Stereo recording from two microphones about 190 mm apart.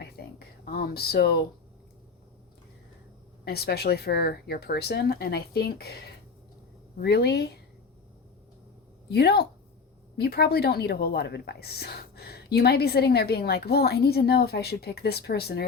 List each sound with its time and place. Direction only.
0.0 s a sound: 55° left (ahead or behind)
3.4 s a woman's voice: 55° left (ahead or behind)
7.0 s a woman's voice: 60° left (ahead or behind)
9.0 s a woman's voice: 60° left (ahead or behind)